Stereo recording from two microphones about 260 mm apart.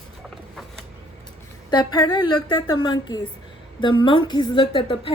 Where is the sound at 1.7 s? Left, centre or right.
Centre.